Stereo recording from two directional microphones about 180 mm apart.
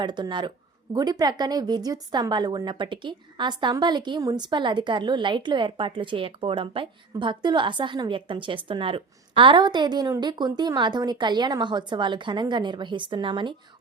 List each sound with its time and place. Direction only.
0.0 s a woman's voice: 25° right (ahead or behind)